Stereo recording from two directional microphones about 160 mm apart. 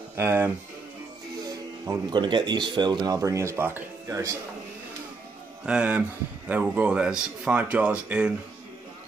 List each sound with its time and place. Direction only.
0.1 s speech: 15° right (ahead or behind)
5.7 s speech: 5° right (ahead or behind)